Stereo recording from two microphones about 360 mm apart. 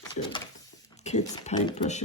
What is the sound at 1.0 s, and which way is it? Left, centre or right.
Speech, centre.